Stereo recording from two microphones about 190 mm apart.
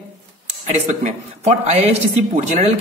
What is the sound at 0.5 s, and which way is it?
Speech, 35° right (ahead or behind).